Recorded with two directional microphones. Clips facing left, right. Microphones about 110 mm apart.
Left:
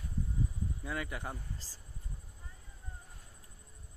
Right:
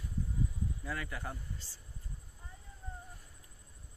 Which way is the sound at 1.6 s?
40° left (ahead or behind).